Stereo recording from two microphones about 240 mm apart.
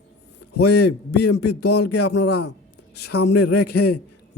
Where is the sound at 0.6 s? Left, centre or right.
Left.